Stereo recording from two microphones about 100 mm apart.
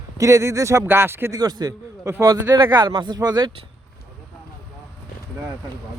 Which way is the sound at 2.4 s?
20° right (ahead or behind).